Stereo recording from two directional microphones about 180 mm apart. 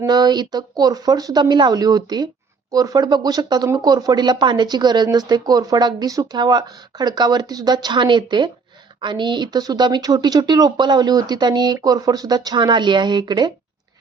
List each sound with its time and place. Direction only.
0.0 s speech: 20° right (ahead or behind)